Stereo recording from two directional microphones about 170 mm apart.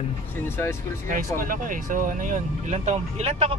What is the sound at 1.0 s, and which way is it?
Speech, 55° right (ahead or behind).